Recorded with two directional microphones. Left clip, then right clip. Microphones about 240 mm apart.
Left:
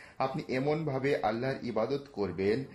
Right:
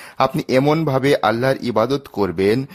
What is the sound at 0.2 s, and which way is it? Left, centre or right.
Speech, right.